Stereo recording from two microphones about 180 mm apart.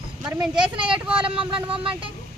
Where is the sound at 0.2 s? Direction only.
5° right (ahead or behind).